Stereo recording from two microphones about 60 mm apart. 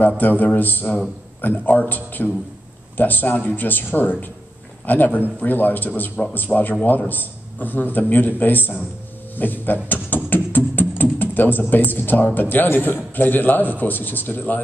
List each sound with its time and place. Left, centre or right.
0.2 s a man's voice: left